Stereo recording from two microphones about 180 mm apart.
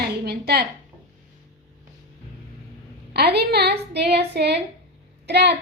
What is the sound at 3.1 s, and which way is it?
A woman's voice, 65° right (ahead or behind).